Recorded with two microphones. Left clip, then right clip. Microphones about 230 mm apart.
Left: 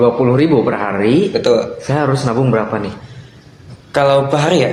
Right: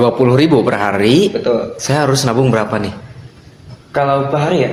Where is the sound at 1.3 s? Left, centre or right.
Left.